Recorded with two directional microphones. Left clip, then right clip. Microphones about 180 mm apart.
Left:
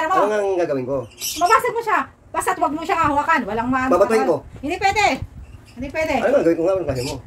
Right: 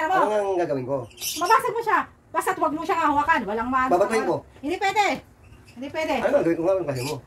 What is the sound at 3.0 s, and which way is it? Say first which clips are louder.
A woman's voice: left 3 dB; 20° right (ahead or behind).